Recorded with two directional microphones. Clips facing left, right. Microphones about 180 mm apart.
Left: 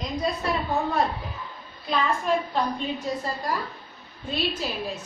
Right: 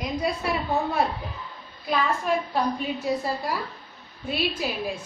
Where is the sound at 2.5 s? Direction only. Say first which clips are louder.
Right 1 dB; 10° right (ahead or behind).